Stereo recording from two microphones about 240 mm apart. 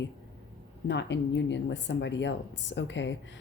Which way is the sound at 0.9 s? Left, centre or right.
Left.